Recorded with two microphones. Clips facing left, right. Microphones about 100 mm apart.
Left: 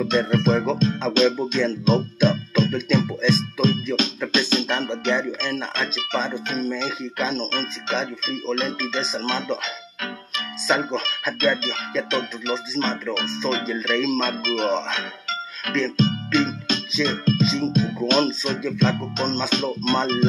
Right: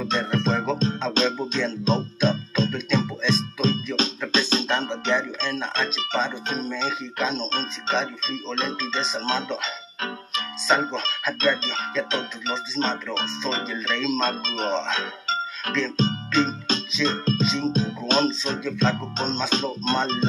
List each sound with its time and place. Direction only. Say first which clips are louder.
0.1 s music: left 3 dB; 30° right (ahead or behind)
6.8 s speech: even; 25° right (ahead or behind)
10.0 s music: right 1 dB; 30° right (ahead or behind)
11.4 s speech: left 2 dB; 30° right (ahead or behind)
14.3 s speech: left 3 dB; 35° right (ahead or behind)
16.0 s music: left 1 dB; 30° right (ahead or behind)
17.0 s speech: left 3 dB; 35° right (ahead or behind)
19.5 s speech: left 2 dB; 30° right (ahead or behind)